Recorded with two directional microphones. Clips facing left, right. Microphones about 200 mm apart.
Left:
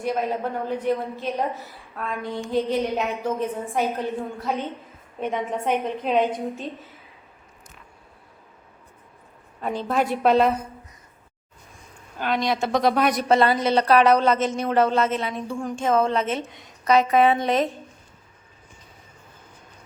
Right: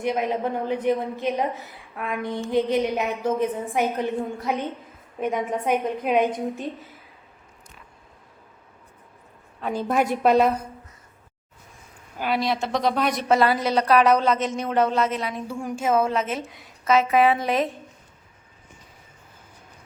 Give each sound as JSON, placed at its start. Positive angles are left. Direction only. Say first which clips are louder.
{"t": 0.0, "sound": "a woman's voice", "louder": "right 1 dB", "side_deg": -15}
{"t": 9.7, "sound": "a woman's voice", "louder": "right 1 dB", "side_deg": -10}
{"t": 12.2, "sound": "speech", "louder": "left 1 dB", "side_deg": -5}
{"t": 13.7, "sound": "speech", "louder": "left 1 dB", "side_deg": 30}
{"t": 14.0, "sound": "speech", "louder": "left 1 dB", "side_deg": 0}